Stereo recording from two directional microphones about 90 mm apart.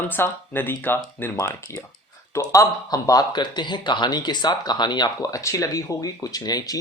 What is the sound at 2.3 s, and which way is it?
Speech, 40° left (ahead or behind).